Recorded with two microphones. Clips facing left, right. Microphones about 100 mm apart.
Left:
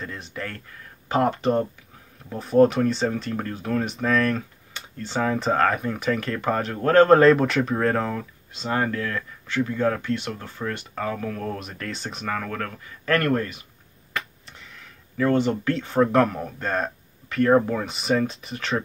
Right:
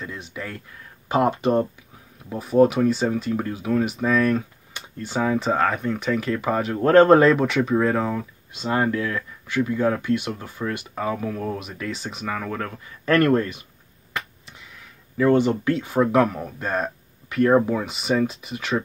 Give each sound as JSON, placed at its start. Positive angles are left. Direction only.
{"t": 0.0, "sound": "speech", "side_deg": -5}
{"t": 6.8, "sound": "speech", "side_deg": -20}
{"t": 7.2, "sound": "speech", "side_deg": 0}
{"t": 8.6, "sound": "speech", "side_deg": -15}
{"t": 12.5, "sound": "speech", "side_deg": -15}
{"t": 15.1, "sound": "speech", "side_deg": -15}